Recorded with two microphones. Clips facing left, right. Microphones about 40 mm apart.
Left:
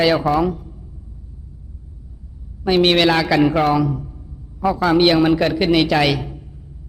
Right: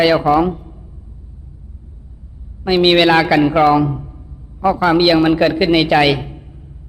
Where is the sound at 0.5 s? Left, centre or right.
Right.